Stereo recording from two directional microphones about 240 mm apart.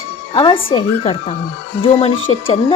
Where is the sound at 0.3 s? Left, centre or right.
Centre.